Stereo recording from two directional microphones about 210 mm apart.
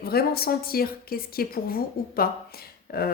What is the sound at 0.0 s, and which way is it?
A woman's voice, 45° left (ahead or behind).